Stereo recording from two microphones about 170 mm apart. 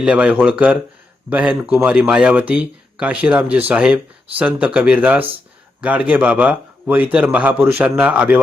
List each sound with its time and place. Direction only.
0.0 s speech: 5° right (ahead or behind)